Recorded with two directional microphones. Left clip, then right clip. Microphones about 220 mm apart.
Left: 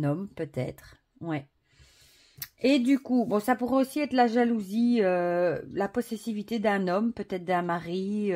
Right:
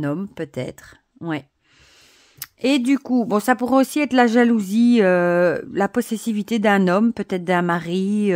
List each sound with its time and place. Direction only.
0.0 s speech: 35° right (ahead or behind)
2.3 s speech: 25° right (ahead or behind); by 8.3 s 40° right (ahead or behind)